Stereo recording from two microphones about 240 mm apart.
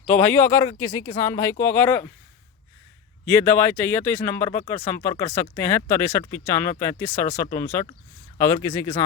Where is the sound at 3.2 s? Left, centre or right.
Centre.